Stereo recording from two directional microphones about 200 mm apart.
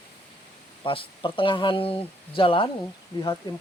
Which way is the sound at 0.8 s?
25° left (ahead or behind).